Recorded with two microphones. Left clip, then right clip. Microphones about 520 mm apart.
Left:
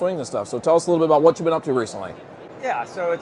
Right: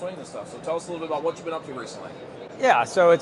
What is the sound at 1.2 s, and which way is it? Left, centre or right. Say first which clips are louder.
Speech: left 11 dB; left.